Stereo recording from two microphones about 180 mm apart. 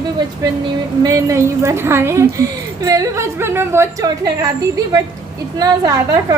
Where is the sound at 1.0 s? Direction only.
15° right (ahead or behind).